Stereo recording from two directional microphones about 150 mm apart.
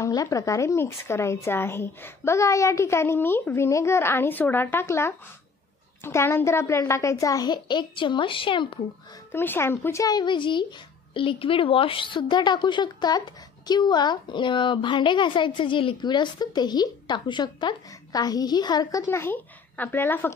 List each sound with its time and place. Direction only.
0.0 s a woman's voice: 20° left (ahead or behind)
9.3 s a woman's voice: 15° left (ahead or behind)